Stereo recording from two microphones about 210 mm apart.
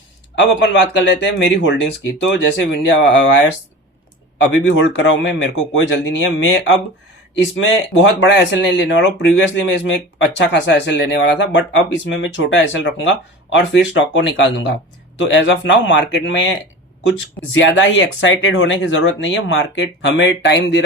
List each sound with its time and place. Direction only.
0.3 s speech: 60° left (ahead or behind)
4.4 s speech: 60° left (ahead or behind)
7.3 s speech: 65° left (ahead or behind)